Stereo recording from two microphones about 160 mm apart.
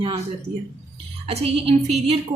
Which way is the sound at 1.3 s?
40° right (ahead or behind).